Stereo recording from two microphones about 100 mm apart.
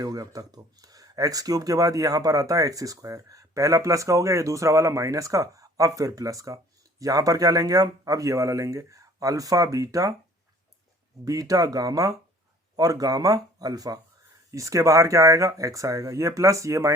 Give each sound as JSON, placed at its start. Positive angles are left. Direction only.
{"t": 0.0, "sound": "speech", "side_deg": -40}
{"t": 11.3, "sound": "speech", "side_deg": -35}